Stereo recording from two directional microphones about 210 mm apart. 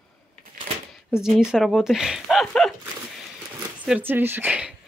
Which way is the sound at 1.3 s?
Centre (ahead or behind).